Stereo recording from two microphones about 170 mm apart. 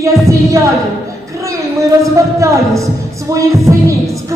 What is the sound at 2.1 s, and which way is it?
Speech, 20° right (ahead or behind).